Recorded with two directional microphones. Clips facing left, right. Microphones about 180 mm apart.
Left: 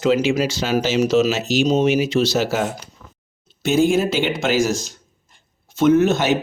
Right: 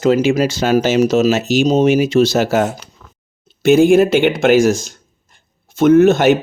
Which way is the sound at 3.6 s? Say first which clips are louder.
Right 7 dB; 55° right (ahead or behind).